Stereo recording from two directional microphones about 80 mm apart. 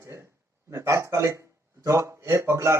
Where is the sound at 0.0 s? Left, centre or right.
Right.